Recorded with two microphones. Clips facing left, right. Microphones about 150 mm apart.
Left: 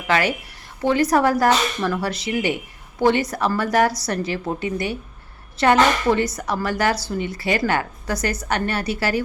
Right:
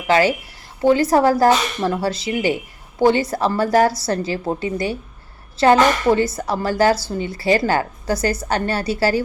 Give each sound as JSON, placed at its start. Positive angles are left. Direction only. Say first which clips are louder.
{"t": 0.1, "sound": "a woman's voice", "louder": "right 5 dB", "side_deg": -30}